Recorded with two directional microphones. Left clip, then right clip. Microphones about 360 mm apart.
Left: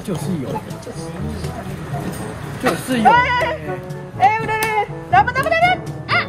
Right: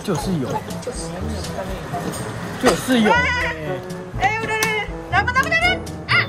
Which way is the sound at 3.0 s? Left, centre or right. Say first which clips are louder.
Left 7 dB; centre.